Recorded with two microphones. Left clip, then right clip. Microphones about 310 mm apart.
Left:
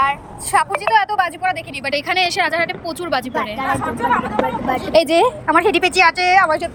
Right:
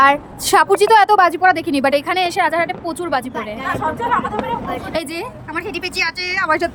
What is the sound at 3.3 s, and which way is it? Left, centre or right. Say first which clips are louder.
Speech: left 3 dB; centre.